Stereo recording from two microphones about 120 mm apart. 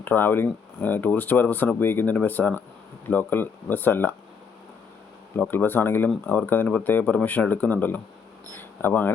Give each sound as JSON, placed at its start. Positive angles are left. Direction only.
{"t": 0.0, "sound": "speech", "side_deg": 15}
{"t": 5.4, "sound": "speech", "side_deg": 15}